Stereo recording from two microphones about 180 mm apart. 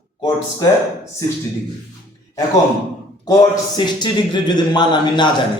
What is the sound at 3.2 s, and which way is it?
A man's voice, 20° left (ahead or behind).